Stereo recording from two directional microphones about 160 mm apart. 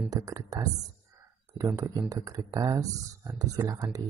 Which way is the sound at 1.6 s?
20° right (ahead or behind).